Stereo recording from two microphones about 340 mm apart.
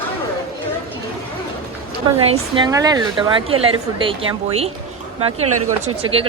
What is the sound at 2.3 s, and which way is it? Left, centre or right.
Speech, centre.